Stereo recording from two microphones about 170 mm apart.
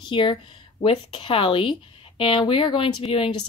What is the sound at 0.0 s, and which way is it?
Speech, 25° left (ahead or behind).